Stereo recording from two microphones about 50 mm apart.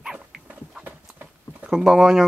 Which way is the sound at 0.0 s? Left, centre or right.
Centre.